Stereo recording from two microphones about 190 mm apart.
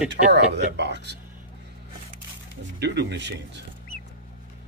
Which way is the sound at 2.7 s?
65° right (ahead or behind).